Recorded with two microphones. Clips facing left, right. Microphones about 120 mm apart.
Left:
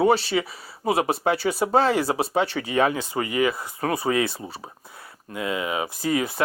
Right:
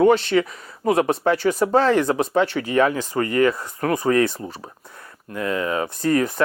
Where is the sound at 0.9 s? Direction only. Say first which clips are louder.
Right 3 dB; 10° left (ahead or behind).